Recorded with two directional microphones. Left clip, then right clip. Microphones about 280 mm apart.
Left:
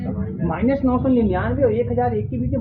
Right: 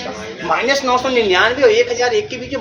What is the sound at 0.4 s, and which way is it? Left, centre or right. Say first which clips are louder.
Speech: right 6 dB; right.